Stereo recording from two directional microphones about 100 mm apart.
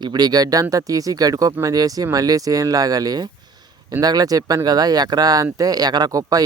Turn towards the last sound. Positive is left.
turn(degrees=-40)  # may be behind; listen again after turning